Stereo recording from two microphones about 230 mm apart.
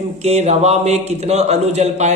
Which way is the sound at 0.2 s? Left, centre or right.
Right.